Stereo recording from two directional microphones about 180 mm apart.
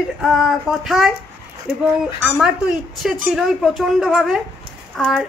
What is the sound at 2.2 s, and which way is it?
A woman's voice, centre (ahead or behind).